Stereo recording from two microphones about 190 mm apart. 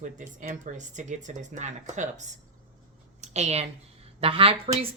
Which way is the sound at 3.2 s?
35° right (ahead or behind).